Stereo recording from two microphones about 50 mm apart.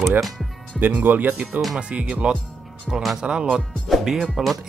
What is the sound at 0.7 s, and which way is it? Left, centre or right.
Speech, right.